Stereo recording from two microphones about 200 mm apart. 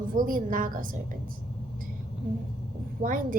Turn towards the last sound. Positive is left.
turn(degrees=-40)  # may be behind; listen again after turning